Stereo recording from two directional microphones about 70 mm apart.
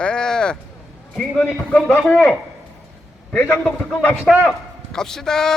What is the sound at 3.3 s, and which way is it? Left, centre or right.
Speech, left.